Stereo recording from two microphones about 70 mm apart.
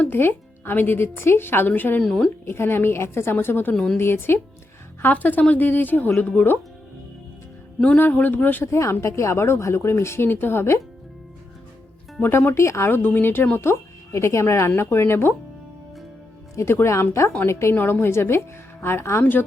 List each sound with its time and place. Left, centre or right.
0.0 s speech: left
2.0 s speech: centre
2.4 s speech: left
7.9 s speech: left
8.6 s speech: left
12.2 s speech: left
12.9 s speech: left
16.8 s speech: left
19.2 s speech: left